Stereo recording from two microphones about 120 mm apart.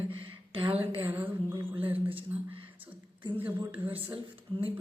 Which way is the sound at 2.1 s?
50° right (ahead or behind).